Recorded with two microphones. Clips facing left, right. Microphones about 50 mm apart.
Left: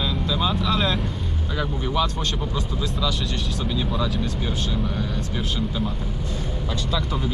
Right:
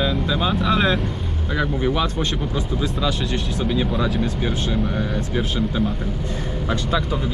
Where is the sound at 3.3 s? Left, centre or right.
Centre.